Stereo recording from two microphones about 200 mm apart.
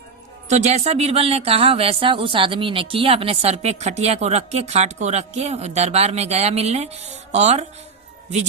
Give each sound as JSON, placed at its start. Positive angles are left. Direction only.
{"t": 0.4, "sound": "speech", "side_deg": -35}